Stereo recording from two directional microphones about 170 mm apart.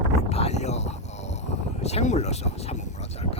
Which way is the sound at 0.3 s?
40° left (ahead or behind).